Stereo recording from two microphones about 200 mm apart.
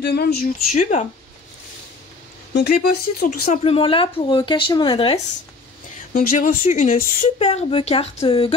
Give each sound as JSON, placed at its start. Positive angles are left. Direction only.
{"t": 0.0, "sound": "speech", "side_deg": 55}
{"t": 0.7, "sound": "speech", "side_deg": 35}
{"t": 2.5, "sound": "speech", "side_deg": 55}
{"t": 3.3, "sound": "speech", "side_deg": 35}
{"t": 6.1, "sound": "speech", "side_deg": 40}